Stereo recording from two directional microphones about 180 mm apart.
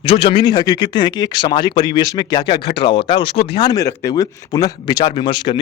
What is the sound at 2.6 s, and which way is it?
Speech, 65° left (ahead or behind).